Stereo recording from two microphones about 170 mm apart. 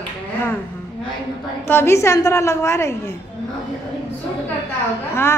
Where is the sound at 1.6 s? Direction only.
15° left (ahead or behind).